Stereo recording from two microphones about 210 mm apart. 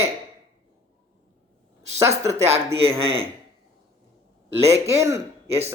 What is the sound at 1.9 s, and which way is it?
Speech, 15° right (ahead or behind).